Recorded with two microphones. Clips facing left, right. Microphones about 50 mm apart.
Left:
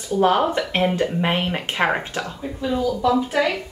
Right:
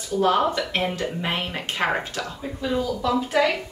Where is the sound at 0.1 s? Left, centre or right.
Left.